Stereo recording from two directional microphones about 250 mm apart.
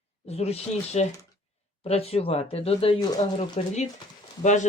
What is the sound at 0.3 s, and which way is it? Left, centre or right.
Speech, left.